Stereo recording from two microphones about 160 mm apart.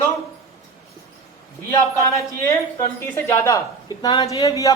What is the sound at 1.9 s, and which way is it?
A woman's voice, 20° left (ahead or behind).